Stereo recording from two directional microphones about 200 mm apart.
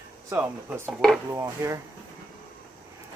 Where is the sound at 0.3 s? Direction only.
10° right (ahead or behind).